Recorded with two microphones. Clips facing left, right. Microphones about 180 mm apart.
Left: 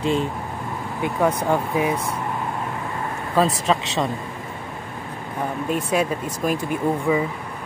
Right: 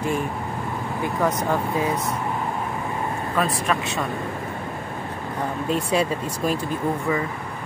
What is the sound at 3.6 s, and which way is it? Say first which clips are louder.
Speech: left 3 dB; 20° left (ahead or behind).